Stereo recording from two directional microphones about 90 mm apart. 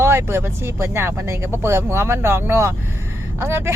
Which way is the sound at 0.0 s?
30° right (ahead or behind).